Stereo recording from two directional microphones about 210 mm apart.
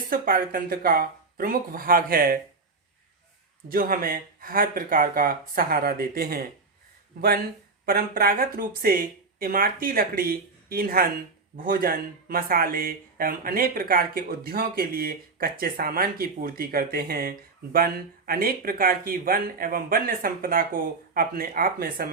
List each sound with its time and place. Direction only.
0.1 s speech: 45° right (ahead or behind)
3.7 s speech: 40° right (ahead or behind)